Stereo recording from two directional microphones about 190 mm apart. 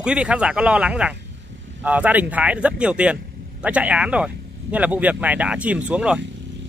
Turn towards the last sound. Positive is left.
turn(degrees=-70)  # may be behind; listen again after turning